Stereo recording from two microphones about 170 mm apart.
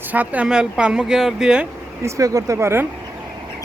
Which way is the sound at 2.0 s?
20° right (ahead or behind).